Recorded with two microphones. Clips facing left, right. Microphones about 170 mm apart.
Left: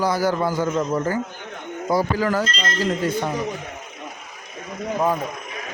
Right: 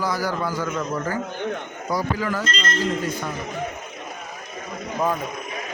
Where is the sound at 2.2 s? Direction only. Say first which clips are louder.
Left 4 dB; 40° left (ahead or behind).